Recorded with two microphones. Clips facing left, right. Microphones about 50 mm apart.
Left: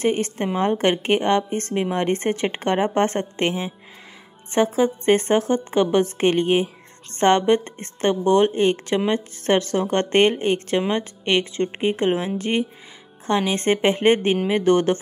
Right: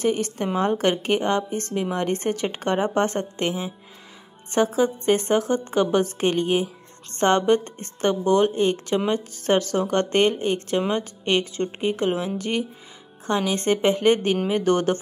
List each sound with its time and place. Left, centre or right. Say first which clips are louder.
0.0 s a woman's voice: left 2 dB; left
4.7 s a woman's voice: left 2 dB; left